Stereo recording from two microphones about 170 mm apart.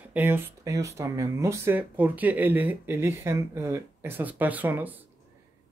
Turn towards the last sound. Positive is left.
turn(degrees=-10)  # may be behind; listen again after turning